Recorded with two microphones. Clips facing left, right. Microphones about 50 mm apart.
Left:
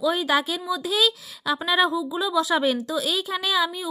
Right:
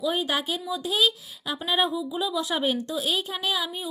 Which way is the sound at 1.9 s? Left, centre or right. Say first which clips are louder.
Left 3 dB; left.